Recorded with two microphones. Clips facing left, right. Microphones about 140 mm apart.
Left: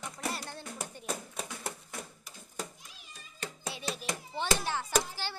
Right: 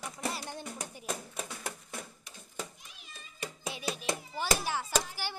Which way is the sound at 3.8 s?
Centre (ahead or behind).